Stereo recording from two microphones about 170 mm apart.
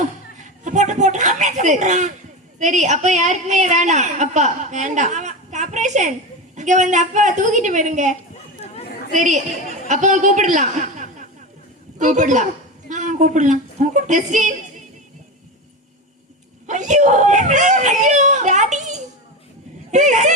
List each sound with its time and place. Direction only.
0.4 s a sound: 45° right (ahead or behind)
2.6 s a woman's voice: 45° right (ahead or behind)
9.1 s a woman's voice: 45° right (ahead or behind)
16.6 s screaming: 45° right (ahead or behind)
19.9 s speech: 45° right (ahead or behind)